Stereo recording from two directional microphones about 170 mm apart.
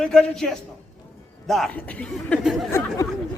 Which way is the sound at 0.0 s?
5° left (ahead or behind).